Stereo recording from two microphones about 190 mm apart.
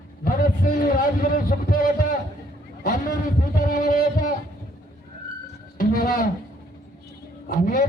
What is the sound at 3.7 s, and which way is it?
Speech, 45° left (ahead or behind).